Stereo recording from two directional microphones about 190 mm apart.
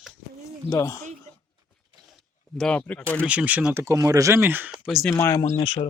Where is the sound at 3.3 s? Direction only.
5° right (ahead or behind).